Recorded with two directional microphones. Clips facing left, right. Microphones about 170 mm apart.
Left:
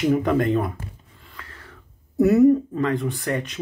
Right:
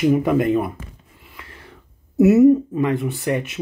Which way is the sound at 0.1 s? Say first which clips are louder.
Right 3 dB; 5° right (ahead or behind).